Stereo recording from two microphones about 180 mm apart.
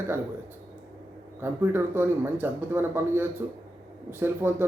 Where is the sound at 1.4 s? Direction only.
10° right (ahead or behind).